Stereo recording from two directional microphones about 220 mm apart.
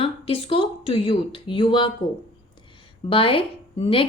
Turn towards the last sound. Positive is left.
turn(degrees=25)  # may be behind; listen again after turning